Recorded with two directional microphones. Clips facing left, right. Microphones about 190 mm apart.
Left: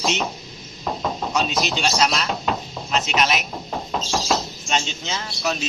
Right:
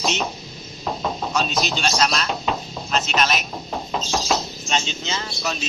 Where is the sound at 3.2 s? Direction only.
10° left (ahead or behind).